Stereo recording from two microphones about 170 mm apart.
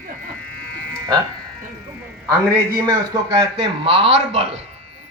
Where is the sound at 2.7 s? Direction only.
25° right (ahead or behind).